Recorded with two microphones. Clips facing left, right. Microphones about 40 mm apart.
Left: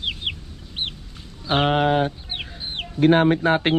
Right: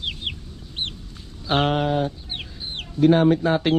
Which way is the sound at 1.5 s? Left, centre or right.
Centre.